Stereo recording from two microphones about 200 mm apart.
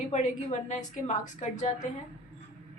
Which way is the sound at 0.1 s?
35° left (ahead or behind).